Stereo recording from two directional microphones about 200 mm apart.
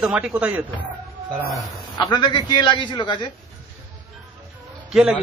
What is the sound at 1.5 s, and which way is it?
A man's voice, 20° left (ahead or behind).